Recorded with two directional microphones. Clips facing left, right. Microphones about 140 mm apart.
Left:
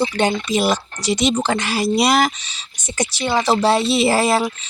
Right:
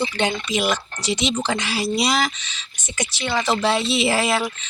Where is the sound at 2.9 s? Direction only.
35° left (ahead or behind).